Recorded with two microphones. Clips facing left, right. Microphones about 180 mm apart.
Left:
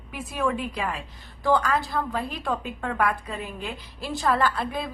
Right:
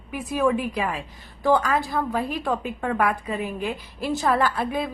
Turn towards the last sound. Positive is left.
turn(degrees=-15)  # may be behind; listen again after turning